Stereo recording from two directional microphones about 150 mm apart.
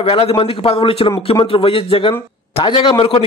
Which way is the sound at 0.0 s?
40° left (ahead or behind).